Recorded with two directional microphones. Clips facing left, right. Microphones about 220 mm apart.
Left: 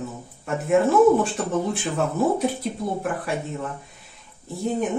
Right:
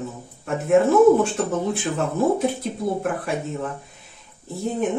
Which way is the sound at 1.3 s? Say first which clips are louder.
Right 1 dB; centre (ahead or behind).